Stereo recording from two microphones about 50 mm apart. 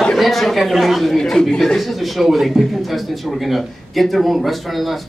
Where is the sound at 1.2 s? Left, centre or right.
Centre.